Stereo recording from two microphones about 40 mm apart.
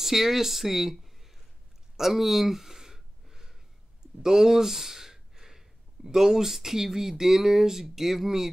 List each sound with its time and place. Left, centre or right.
0.0 s speech: centre
2.0 s a sound: centre
4.2 s speech: centre